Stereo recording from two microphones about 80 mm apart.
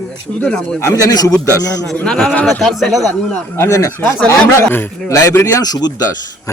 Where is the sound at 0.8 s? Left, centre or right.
Left.